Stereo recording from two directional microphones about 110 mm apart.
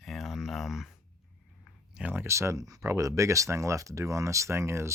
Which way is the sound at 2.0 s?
15° right (ahead or behind).